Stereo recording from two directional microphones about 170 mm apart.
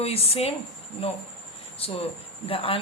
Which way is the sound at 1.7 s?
35° left (ahead or behind).